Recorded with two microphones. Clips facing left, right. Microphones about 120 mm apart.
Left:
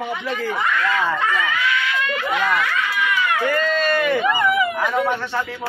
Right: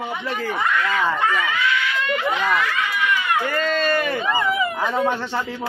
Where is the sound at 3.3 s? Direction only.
30° right (ahead or behind).